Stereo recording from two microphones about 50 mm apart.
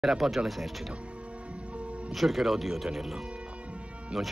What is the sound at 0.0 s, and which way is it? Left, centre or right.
Speech, centre.